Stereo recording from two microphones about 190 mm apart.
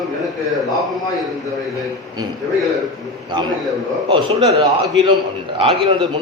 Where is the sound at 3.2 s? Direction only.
25° right (ahead or behind).